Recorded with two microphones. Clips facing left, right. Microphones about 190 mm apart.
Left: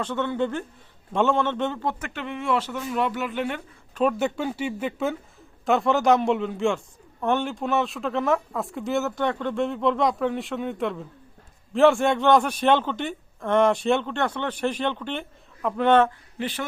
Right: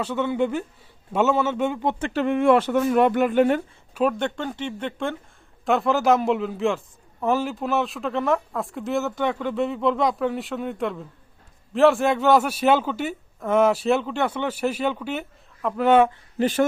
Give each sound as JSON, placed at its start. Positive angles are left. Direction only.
{"t": 0.0, "sound": "a man's voice", "side_deg": -10}
{"t": 1.8, "sound": "speech", "side_deg": -25}
{"t": 2.2, "sound": "speech", "side_deg": -55}
{"t": 4.2, "sound": "a man's voice", "side_deg": 5}
{"t": 16.4, "sound": "speech", "side_deg": -45}